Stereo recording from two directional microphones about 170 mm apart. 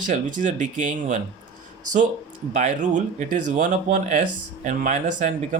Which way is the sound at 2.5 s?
45° right (ahead or behind).